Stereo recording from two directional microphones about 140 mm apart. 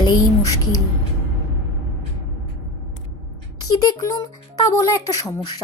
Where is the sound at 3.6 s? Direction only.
25° left (ahead or behind).